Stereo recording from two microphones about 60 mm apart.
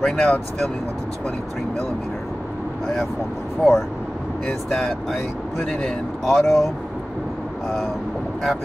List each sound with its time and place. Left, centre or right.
0.0 s speech: centre
3.6 s speech: centre